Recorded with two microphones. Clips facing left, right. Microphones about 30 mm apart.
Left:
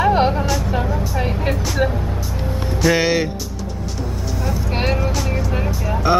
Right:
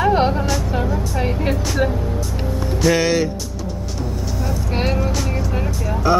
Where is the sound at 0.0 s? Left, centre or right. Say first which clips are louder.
Left 1 dB; centre.